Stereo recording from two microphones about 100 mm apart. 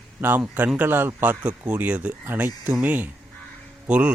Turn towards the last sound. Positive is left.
turn(degrees=-10)  # may be behind; listen again after turning